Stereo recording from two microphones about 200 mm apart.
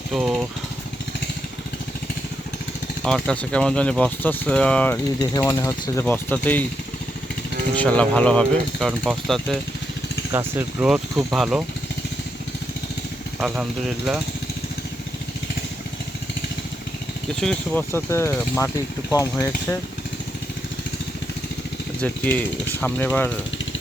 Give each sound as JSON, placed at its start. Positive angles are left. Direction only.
{"t": 0.1, "sound": "speech", "side_deg": 0}
{"t": 3.0, "sound": "speech", "side_deg": 5}
{"t": 5.3, "sound": "speech", "side_deg": 15}
{"t": 7.8, "sound": "speech", "side_deg": 5}
{"t": 10.3, "sound": "speech", "side_deg": -10}
{"t": 13.4, "sound": "speech", "side_deg": 0}
{"t": 17.4, "sound": "speech", "side_deg": 5}
{"t": 22.0, "sound": "speech", "side_deg": 10}